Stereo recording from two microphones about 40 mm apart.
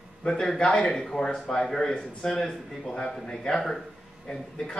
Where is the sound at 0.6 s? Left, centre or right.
Left.